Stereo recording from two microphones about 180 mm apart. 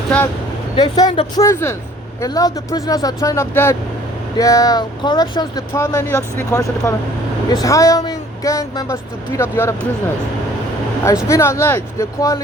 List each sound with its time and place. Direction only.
0.8 s speech: 20° left (ahead or behind)
11.3 s speech: 15° left (ahead or behind)